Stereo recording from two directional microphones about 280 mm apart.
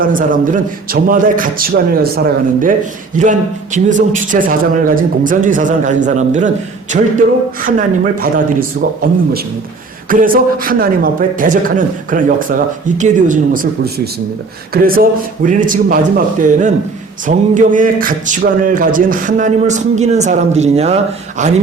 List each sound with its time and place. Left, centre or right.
0.0 s speech: right
10.1 s speech: right